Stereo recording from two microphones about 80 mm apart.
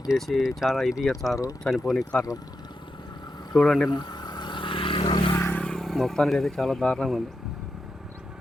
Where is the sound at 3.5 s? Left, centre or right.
Centre.